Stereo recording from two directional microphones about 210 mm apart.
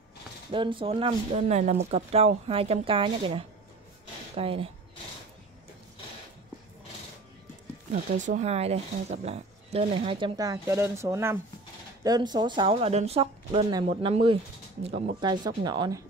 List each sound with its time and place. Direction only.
0.5 s speech: 25° right (ahead or behind)
7.9 s speech: 40° right (ahead or behind); by 16.0 s 20° right (ahead or behind)